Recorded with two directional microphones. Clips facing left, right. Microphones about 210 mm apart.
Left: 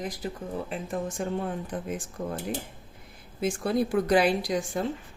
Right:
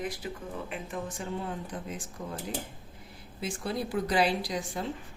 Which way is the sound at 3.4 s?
50° left (ahead or behind).